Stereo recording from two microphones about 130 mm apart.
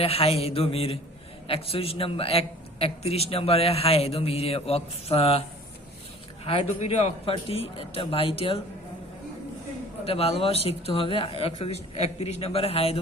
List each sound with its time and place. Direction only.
0.0 s a man's voice: 50° left (ahead or behind)
10.1 s a man's voice: 50° left (ahead or behind)